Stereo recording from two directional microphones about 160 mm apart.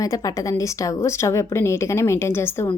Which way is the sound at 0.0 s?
20° left (ahead or behind).